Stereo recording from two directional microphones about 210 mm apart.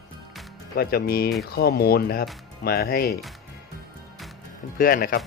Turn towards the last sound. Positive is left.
turn(degrees=45)  # may be behind; listen again after turning